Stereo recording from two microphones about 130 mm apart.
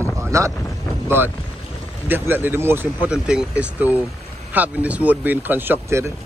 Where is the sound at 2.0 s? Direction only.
15° right (ahead or behind).